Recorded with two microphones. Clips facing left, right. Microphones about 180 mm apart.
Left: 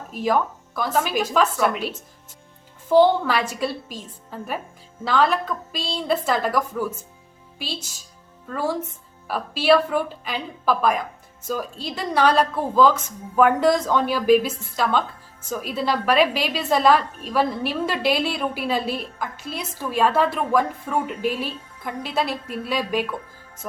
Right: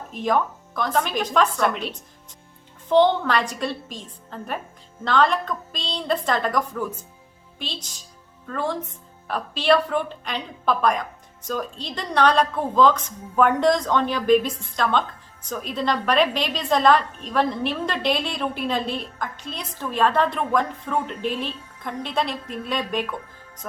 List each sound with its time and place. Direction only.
0.1 s a woman's voice: 5° left (ahead or behind)